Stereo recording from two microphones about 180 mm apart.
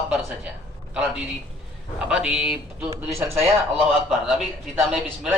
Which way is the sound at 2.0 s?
5° right (ahead or behind).